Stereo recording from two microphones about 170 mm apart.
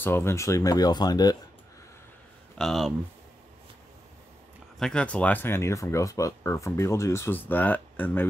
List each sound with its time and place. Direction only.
0.0 s speech: 15° left (ahead or behind)
2.5 s speech: centre (ahead or behind)
4.7 s speech: 5° left (ahead or behind)